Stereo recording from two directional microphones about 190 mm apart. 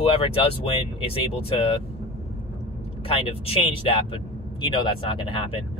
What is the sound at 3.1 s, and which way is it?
Speech, 30° left (ahead or behind).